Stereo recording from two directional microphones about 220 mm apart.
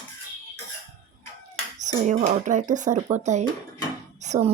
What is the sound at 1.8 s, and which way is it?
Speech, 30° right (ahead or behind).